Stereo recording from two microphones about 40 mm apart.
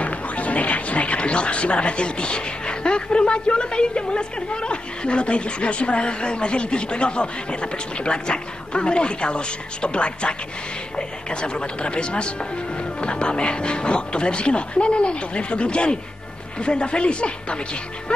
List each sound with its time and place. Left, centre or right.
0.0 s speech: left